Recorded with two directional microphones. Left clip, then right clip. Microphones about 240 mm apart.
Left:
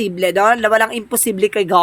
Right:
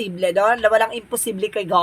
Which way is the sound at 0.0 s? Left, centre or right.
Left.